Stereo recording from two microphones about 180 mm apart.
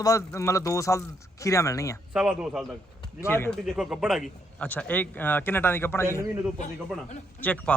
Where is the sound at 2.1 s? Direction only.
5° right (ahead or behind).